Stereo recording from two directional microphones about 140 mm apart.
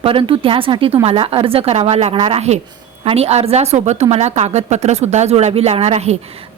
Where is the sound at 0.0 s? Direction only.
40° right (ahead or behind).